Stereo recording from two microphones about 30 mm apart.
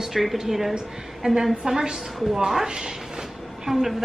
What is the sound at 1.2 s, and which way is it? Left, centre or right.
A woman's voice, right.